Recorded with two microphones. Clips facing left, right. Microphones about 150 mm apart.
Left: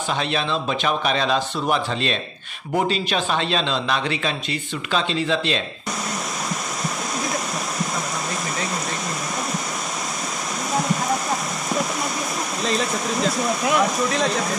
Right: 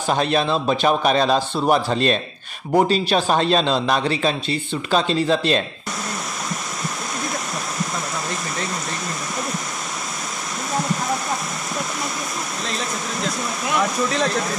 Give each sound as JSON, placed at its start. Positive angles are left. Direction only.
{"t": 0.1, "sound": "a man's voice", "side_deg": -45}
{"t": 12.6, "sound": "speech", "side_deg": 0}